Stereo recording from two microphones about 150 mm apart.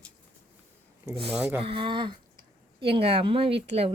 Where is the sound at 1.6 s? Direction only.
35° right (ahead or behind).